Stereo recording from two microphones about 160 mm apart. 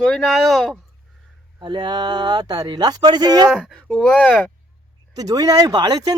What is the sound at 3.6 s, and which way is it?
Speech, 5° left (ahead or behind).